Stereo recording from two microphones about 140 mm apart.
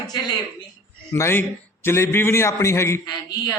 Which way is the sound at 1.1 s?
20° left (ahead or behind).